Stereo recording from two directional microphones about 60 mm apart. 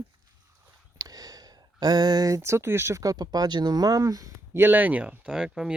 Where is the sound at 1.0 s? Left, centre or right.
Right.